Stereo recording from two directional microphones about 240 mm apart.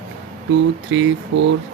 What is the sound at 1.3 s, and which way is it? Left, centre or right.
Speech, right.